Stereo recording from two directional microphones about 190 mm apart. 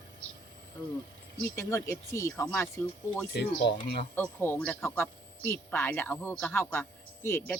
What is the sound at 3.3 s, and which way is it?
Speech, 60° left (ahead or behind).